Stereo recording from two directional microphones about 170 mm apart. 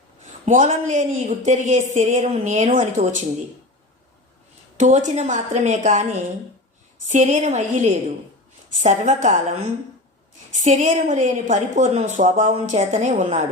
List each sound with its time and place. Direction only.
0.4 s a woman's voice: 45° right (ahead or behind)
4.8 s a woman's voice: 45° right (ahead or behind)
10.6 s a woman's voice: 45° right (ahead or behind)